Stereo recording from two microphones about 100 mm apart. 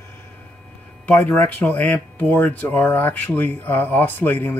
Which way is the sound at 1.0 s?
15° left (ahead or behind).